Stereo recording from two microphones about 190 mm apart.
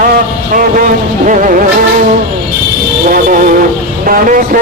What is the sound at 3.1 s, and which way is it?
Music, 45° right (ahead or behind).